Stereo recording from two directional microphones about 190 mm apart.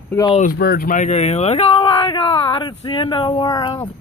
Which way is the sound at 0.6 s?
55° left (ahead or behind).